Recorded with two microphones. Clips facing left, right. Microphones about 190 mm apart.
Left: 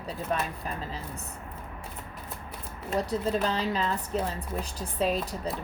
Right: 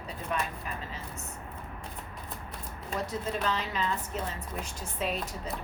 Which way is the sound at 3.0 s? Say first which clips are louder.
Left 3 dB; 35° left (ahead or behind).